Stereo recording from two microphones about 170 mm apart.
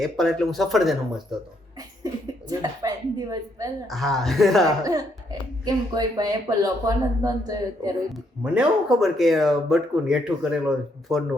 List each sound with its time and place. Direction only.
0.0 s speech: centre (ahead or behind)
2.5 s speech: 20° right (ahead or behind)
3.8 s speech: centre (ahead or behind)
4.8 s speech: 20° right (ahead or behind)
8.1 s speech: centre (ahead or behind)